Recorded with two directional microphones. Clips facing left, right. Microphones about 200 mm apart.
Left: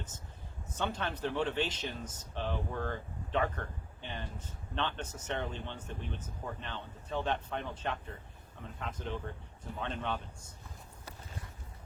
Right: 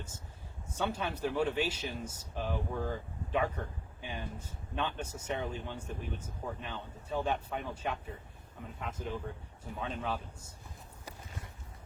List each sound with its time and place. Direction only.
0.8 s a man's voice: 10° right (ahead or behind)